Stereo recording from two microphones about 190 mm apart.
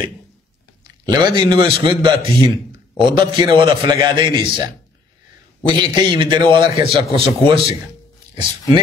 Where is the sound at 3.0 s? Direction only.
25° right (ahead or behind).